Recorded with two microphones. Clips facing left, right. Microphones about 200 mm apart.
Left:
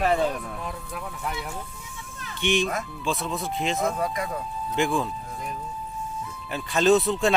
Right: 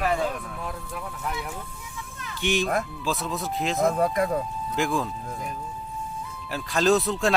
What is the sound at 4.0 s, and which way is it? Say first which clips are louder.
Speech: right 5 dB; 55° right (ahead or behind).